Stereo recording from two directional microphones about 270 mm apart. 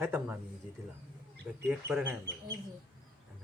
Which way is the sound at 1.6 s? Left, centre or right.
Centre.